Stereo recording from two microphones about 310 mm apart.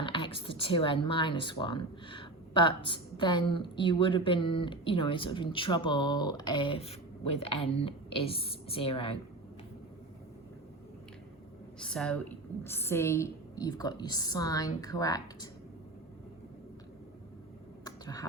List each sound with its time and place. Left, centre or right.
0.0 s speech: centre
11.8 s speech: centre
17.8 s a sound: centre